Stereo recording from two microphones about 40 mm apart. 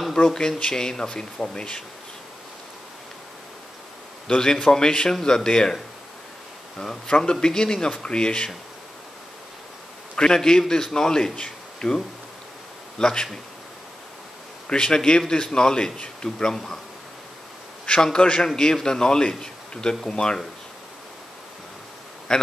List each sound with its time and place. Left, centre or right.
0.1 s a man's voice: centre
4.3 s a man's voice: centre
6.8 s a man's voice: centre
10.1 s speech: centre
13.0 s a man's voice: left
14.7 s a man's voice: centre
16.5 s speech: centre
17.8 s a man's voice: left
22.3 s speech: centre